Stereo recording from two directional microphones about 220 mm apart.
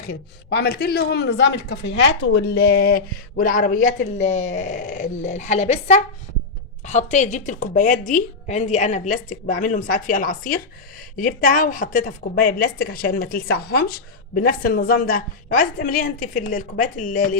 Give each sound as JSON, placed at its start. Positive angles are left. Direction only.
{"t": 0.1, "sound": "a woman's voice", "side_deg": 45}